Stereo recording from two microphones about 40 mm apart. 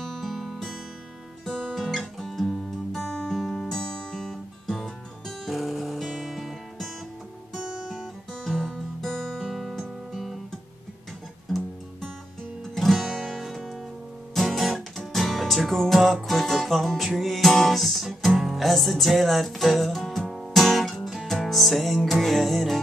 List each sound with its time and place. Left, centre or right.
0.0 s music: centre
1.8 s guitar: centre
3.5 s music: centre
7.6 s guitar: centre
8.5 s music: left
9.1 s guitar: centre
9.4 s music: centre
12.7 s music: centre
18.3 s music: centre
18.6 s music: centre